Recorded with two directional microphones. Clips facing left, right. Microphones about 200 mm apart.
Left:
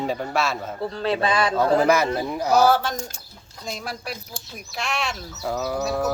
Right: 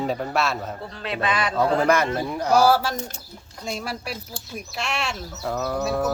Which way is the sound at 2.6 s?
10° right (ahead or behind).